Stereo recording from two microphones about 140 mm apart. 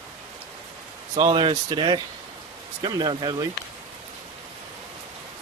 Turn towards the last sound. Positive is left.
turn(degrees=-30)  # may be behind; listen again after turning